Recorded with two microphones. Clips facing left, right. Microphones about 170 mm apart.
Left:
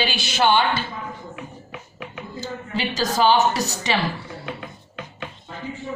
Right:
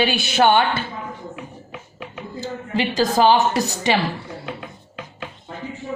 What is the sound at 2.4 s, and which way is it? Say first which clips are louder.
A woman's voice: right 4 dB; 55° right (ahead or behind).